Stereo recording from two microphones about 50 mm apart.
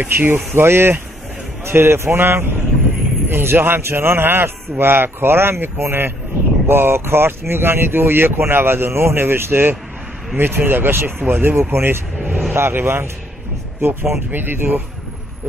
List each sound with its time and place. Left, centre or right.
0.0 s speech: right
0.6 s speech: right
14.3 s speech: right